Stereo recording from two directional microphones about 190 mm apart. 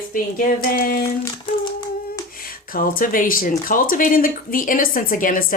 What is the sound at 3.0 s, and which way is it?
Speech, 45° left (ahead or behind).